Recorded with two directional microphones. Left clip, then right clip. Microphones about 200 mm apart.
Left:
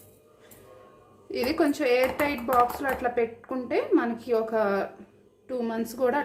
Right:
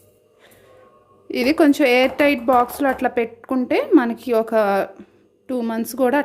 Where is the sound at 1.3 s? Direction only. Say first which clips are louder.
Right 9 dB; 45° right (ahead or behind).